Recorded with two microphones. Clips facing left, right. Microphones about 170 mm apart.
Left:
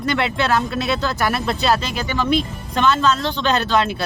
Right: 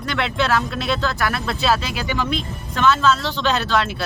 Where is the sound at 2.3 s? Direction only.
Centre (ahead or behind).